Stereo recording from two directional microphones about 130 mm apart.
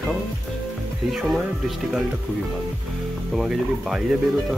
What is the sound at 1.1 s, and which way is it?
Speech, 5° right (ahead or behind).